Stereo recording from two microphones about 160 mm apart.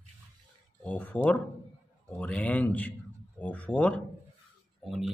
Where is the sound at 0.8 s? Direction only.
10° left (ahead or behind).